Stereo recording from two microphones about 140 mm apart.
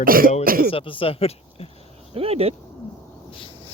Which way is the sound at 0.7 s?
40° left (ahead or behind).